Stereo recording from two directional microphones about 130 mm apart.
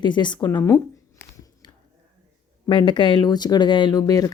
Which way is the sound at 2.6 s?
40° left (ahead or behind).